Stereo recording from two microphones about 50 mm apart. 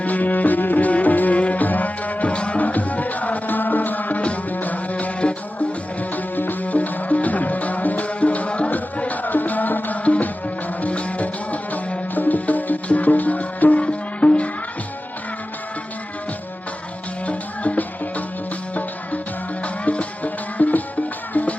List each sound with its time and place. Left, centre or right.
0.0 s music: left
17.2 s music: left